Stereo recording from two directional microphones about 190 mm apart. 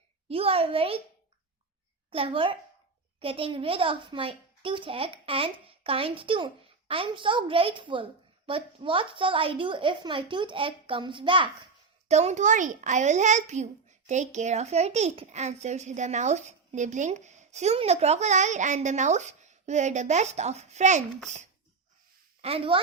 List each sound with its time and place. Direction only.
0.3 s a child's voice: 30° right (ahead or behind)
2.0 s a child's voice: 30° right (ahead or behind)
22.4 s speech: 30° right (ahead or behind)